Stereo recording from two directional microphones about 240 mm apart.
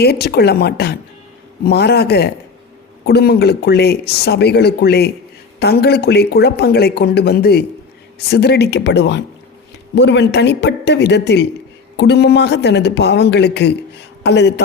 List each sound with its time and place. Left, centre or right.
0.0 s speech: left